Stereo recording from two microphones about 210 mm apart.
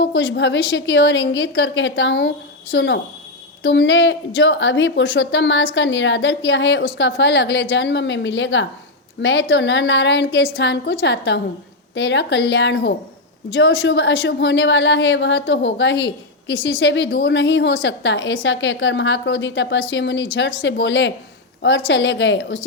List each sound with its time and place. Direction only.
0.0 s a woman's voice: 60° left (ahead or behind)